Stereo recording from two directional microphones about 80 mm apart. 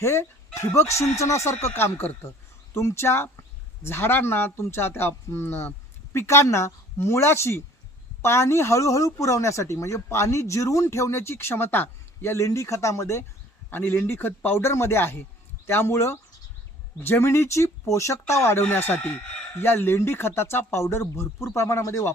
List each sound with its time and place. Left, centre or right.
0.0 s speech: left
13.7 s speech: left